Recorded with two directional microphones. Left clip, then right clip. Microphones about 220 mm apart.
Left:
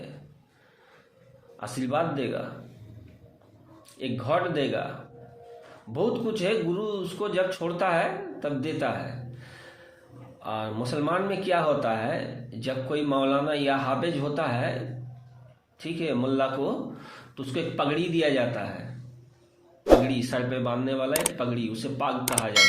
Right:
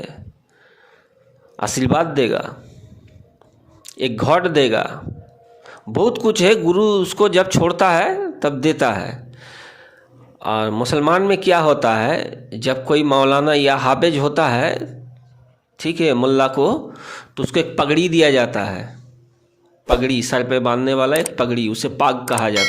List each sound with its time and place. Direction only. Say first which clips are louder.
1.5 s speech: right 10 dB; 50° right (ahead or behind)
3.9 s speech: right 10 dB; 55° right (ahead or behind)
5.9 s speech: right 11 dB; 55° right (ahead or behind)
10.4 s speech: right 12 dB; 55° right (ahead or behind)
15.8 s speech: right 12 dB; 55° right (ahead or behind)
20.1 s speech: right 10 dB; 55° right (ahead or behind)